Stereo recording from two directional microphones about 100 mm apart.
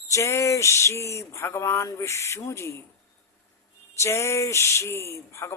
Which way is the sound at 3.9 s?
30° left (ahead or behind).